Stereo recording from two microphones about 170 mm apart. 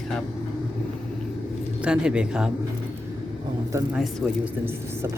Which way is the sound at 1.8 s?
5° right (ahead or behind).